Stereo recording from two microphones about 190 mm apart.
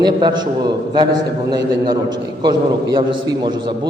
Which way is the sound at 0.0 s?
20° right (ahead or behind).